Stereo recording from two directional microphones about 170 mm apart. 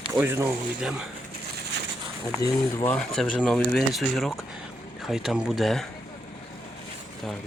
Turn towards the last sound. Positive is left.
turn(degrees=0)  # may be behind; listen again after turning